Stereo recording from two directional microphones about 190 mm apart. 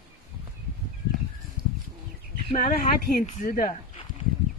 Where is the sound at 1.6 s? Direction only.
25° right (ahead or behind).